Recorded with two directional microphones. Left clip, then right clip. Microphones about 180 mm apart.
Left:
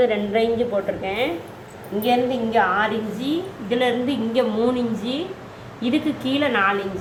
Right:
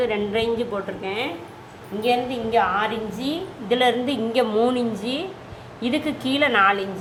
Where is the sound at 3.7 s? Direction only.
40° right (ahead or behind).